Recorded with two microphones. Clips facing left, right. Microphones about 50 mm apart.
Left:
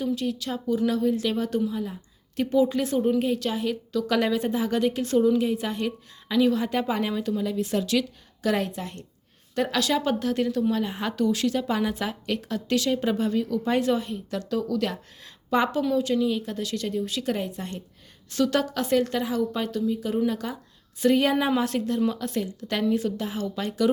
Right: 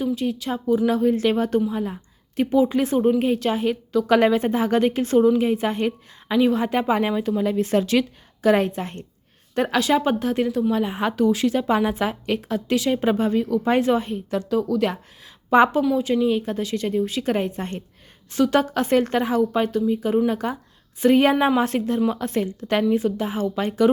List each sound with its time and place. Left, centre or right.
0.0 s a woman's voice: right
2.3 s a woman's voice: right
18.3 s a woman's voice: right